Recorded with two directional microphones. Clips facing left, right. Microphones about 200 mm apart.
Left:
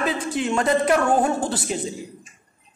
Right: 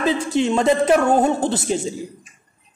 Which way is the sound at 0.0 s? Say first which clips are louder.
Right 4 dB; 25° right (ahead or behind).